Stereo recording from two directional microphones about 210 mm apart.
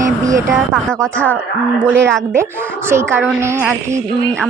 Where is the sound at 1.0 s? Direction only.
5° left (ahead or behind).